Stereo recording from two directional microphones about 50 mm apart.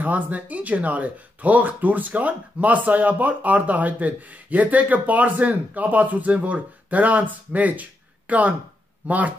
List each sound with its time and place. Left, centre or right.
0.0 s speech: right